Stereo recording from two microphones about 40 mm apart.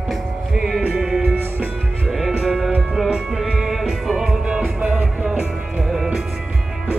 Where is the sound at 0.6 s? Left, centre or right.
Centre.